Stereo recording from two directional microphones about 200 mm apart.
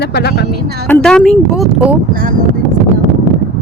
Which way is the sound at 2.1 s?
45° right (ahead or behind).